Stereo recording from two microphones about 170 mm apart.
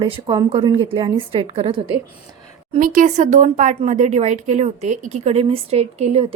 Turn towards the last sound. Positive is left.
turn(degrees=-40)  # may be behind; listen again after turning